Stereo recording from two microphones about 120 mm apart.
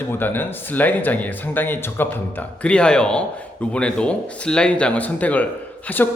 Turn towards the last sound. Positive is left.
turn(degrees=15)  # may be behind; listen again after turning